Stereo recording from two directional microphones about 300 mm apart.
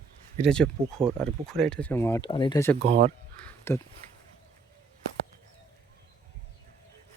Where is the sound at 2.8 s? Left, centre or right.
Right.